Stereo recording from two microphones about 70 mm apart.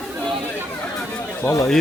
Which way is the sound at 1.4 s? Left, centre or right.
Left.